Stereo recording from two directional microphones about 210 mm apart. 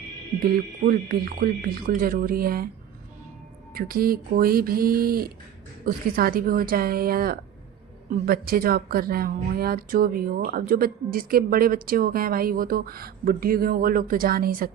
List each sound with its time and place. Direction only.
0.4 s speech: 45° right (ahead or behind)
3.8 s speech: 45° right (ahead or behind)